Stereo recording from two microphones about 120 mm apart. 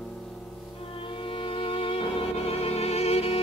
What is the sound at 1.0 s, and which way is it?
Music, 45° left (ahead or behind).